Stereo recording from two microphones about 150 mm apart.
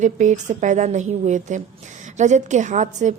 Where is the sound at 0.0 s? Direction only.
55° right (ahead or behind).